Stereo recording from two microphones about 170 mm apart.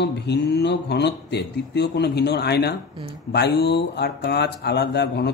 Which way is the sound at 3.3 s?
75° left (ahead or behind).